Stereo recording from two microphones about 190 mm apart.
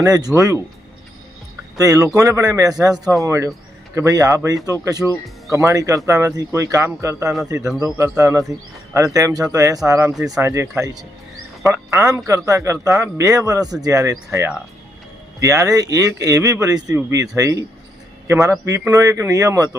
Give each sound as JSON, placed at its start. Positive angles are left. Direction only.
{"t": 0.0, "sound": "speech", "side_deg": -20}
{"t": 1.8, "sound": "speech", "side_deg": -15}